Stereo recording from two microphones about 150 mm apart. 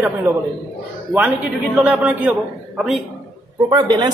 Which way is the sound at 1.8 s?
5° right (ahead or behind).